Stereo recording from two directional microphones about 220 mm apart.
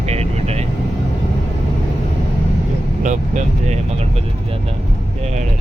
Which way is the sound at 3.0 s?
35° right (ahead or behind).